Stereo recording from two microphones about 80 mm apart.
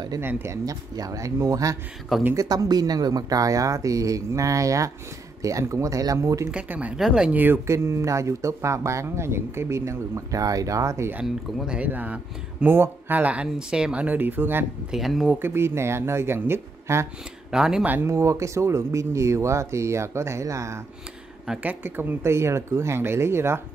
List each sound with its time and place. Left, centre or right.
0.2 s speech: right
0.7 s speech: right
6.7 s speech: centre
7.0 s speech: centre
7.2 s speech: right
11.2 s speech: centre
14.9 s speech: centre
15.3 s speech: right
17.5 s speech: centre
17.8 s speech: right
21.6 s speech: right